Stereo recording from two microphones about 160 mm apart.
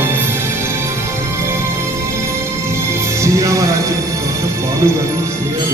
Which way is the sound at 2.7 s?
15° right (ahead or behind).